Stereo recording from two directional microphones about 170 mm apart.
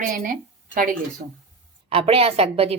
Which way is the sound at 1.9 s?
35° right (ahead or behind).